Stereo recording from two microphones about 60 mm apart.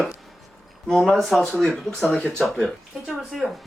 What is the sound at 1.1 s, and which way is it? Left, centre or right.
Speech, centre.